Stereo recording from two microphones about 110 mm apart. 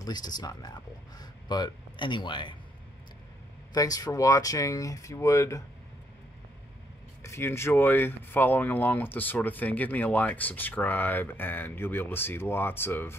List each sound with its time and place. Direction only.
0.0 s speech: 35° left (ahead or behind)
3.7 s speech: 35° left (ahead or behind)
7.2 s speech: 25° left (ahead or behind)